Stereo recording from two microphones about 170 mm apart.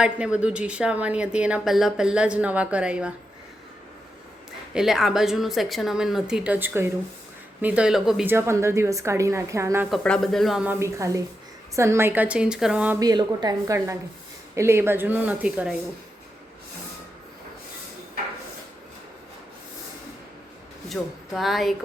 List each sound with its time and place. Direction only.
0.0 s speech: 5° right (ahead or behind)
4.7 s a woman's voice: centre (ahead or behind); by 9.8 s 15° right (ahead or behind)
9.9 s speech: 5° left (ahead or behind)
13.0 s a woman's voice: 25° right (ahead or behind); by 15.7 s 5° right (ahead or behind)
20.9 s a woman's voice: centre (ahead or behind)